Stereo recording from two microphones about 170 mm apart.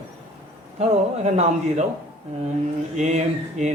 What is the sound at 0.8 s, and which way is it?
A man's voice, 40° right (ahead or behind).